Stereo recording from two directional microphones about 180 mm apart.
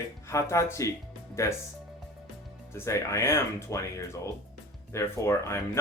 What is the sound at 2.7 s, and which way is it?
Speech, 15° left (ahead or behind).